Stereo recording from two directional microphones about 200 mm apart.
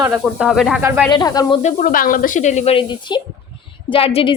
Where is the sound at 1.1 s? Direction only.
20° left (ahead or behind).